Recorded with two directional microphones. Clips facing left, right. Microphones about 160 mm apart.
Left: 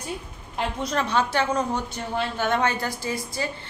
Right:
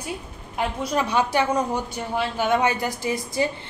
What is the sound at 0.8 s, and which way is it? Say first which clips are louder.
A woman's voice: right 1 dB; 10° right (ahead or behind).